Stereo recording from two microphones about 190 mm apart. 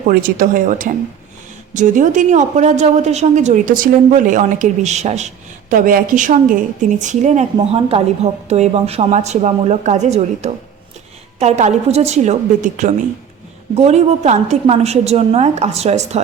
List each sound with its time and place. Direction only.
0.1 s a woman's voice: 50° right (ahead or behind)